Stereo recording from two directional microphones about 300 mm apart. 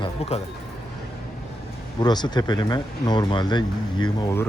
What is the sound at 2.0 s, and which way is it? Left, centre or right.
Speech, centre.